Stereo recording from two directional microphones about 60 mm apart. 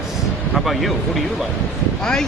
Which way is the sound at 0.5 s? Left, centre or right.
Centre.